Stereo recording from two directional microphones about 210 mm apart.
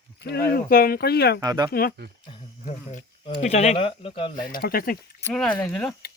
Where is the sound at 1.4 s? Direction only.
15° right (ahead or behind).